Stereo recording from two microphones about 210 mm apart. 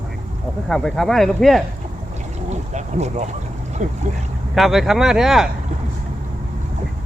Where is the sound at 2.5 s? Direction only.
35° right (ahead or behind).